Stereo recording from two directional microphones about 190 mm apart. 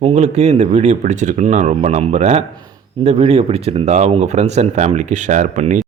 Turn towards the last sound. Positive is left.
turn(degrees=-40)  # may be behind; listen again after turning